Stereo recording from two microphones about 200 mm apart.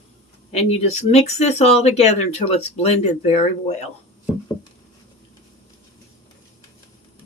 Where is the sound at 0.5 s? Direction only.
30° left (ahead or behind).